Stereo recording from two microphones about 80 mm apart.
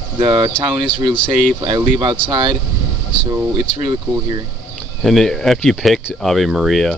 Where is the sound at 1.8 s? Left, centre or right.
Right.